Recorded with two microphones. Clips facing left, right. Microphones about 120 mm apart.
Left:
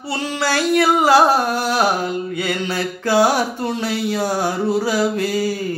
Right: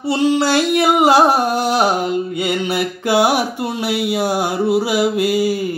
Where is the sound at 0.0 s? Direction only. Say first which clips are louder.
Right 7 dB; 20° right (ahead or behind).